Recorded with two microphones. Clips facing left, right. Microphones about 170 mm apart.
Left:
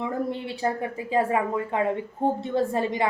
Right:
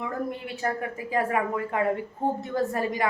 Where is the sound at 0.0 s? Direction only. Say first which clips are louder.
Left 3 dB; 25° left (ahead or behind).